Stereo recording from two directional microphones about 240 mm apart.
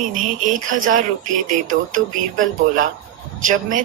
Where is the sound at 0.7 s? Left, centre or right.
Right.